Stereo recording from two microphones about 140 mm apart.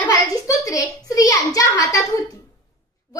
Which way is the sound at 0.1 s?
25° left (ahead or behind).